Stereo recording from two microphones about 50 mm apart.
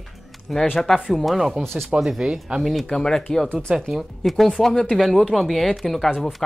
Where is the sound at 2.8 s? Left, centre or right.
Centre.